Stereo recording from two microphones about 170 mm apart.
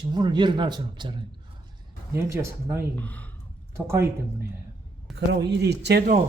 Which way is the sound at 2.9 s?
10° left (ahead or behind).